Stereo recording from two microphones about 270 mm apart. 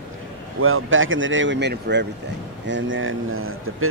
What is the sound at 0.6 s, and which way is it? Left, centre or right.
A man's voice, right.